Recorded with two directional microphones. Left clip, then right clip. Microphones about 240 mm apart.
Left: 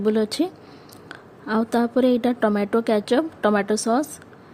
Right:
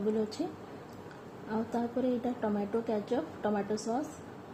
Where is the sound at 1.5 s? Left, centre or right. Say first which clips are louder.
Left 13 dB; left.